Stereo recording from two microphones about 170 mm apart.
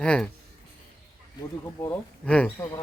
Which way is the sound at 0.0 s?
5° left (ahead or behind).